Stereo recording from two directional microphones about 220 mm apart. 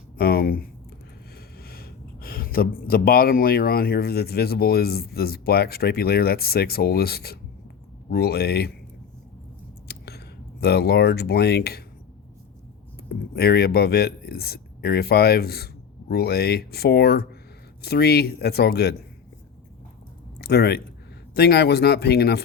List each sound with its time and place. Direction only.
0.2 s speech: 45° left (ahead or behind)
9.9 s speech: 45° left (ahead or behind)
13.3 s speech: 45° left (ahead or behind)
20.4 s speech: 45° left (ahead or behind)